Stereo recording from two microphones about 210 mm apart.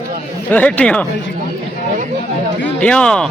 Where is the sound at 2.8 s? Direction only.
5° left (ahead or behind).